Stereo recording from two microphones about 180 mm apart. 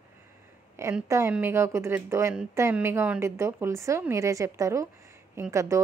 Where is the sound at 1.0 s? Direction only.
15° right (ahead or behind).